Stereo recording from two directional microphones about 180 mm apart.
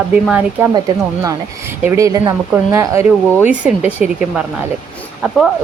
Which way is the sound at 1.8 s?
15° right (ahead or behind).